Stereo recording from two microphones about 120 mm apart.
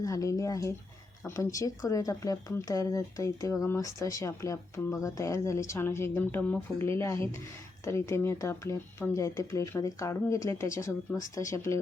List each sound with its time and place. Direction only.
0.0 s speech: 30° left (ahead or behind)